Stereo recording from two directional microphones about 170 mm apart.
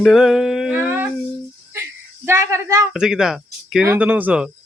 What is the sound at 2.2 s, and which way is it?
Speech, 15° right (ahead or behind).